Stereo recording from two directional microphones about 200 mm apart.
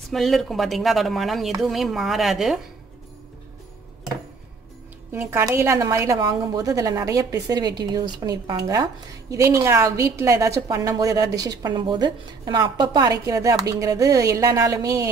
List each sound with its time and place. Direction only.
0.1 s speech: centre (ahead or behind)
5.1 s a woman's voice: 10° right (ahead or behind)